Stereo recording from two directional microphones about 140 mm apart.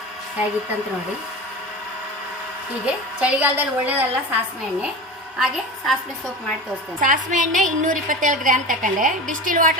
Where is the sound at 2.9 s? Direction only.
10° right (ahead or behind).